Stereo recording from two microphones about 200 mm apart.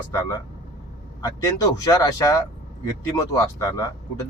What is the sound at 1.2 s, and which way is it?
Speech, 15° left (ahead or behind).